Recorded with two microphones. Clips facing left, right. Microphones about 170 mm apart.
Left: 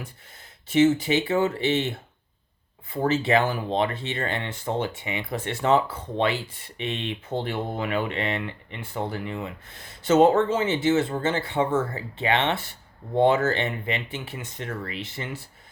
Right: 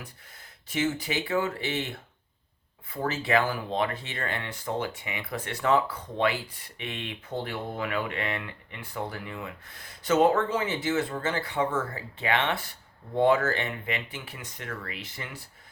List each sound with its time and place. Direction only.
0.7 s speech: 25° left (ahead or behind)